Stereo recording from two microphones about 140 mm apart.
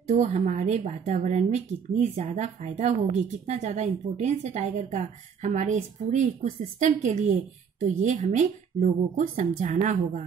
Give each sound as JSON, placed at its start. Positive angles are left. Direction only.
{"t": 0.1, "sound": "a woman's voice", "side_deg": -55}
{"t": 9.4, "sound": "a woman's voice", "side_deg": -60}